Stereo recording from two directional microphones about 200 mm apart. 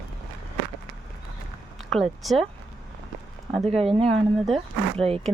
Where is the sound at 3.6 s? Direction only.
30° right (ahead or behind).